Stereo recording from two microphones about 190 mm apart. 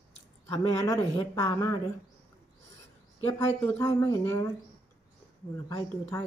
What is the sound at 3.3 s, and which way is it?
Speech, 15° left (ahead or behind).